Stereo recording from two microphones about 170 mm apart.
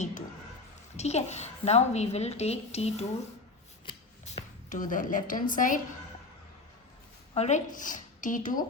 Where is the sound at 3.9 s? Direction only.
25° left (ahead or behind).